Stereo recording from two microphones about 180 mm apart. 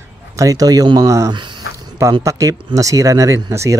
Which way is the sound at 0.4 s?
20° right (ahead or behind).